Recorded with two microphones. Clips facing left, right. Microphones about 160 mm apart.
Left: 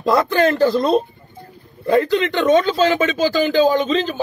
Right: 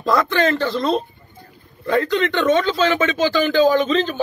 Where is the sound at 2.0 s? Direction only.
35° left (ahead or behind).